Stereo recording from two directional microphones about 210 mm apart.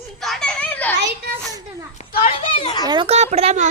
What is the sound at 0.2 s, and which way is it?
Children playing, centre (ahead or behind).